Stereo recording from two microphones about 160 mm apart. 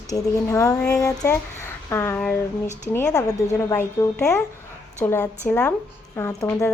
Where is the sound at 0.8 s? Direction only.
5° left (ahead or behind).